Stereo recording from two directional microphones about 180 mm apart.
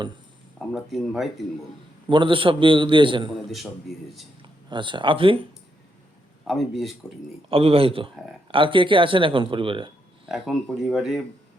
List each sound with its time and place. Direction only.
0.7 s speech: centre (ahead or behind)
2.0 s speech: 30° right (ahead or behind)
4.4 s speech: 25° right (ahead or behind)
6.5 s speech: centre (ahead or behind)
7.5 s speech: 30° right (ahead or behind)
10.2 s speech: centre (ahead or behind)